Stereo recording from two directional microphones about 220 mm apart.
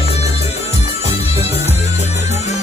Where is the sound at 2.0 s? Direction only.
30° left (ahead or behind).